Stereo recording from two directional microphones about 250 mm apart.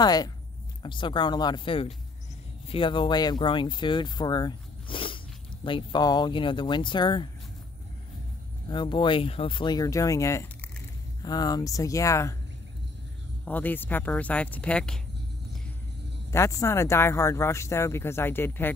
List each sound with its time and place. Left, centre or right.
0.0 s speech: centre
8.6 s speech: centre
13.5 s speech: centre
16.3 s speech: centre